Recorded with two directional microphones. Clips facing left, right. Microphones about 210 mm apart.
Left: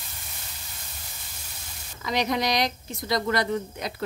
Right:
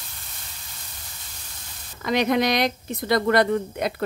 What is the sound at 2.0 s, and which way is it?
Speech, 55° right (ahead or behind).